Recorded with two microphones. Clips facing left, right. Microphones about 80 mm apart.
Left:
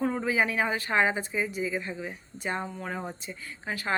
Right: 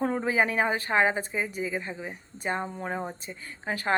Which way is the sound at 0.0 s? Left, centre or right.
Right.